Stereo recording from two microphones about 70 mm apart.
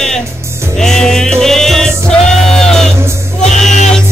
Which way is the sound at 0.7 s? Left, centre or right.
Centre.